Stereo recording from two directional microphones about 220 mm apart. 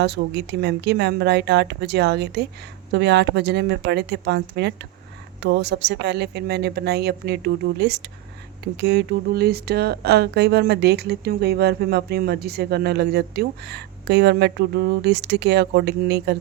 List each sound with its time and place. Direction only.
0.0 s speech: 50° right (ahead or behind)